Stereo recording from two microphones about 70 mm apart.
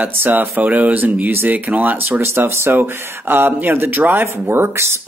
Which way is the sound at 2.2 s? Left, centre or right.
Right.